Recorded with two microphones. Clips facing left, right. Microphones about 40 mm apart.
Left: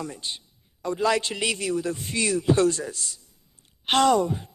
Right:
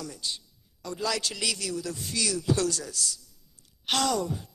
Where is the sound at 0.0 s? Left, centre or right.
Left.